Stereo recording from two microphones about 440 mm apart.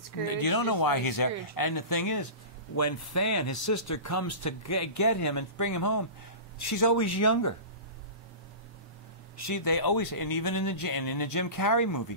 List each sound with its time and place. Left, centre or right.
0.3 s speech: left
9.5 s speech: left